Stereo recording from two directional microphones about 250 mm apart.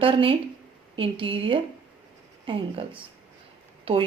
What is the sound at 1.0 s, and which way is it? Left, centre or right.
A woman's voice, right.